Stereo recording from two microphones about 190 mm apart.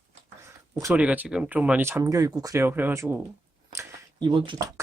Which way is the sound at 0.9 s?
5° right (ahead or behind).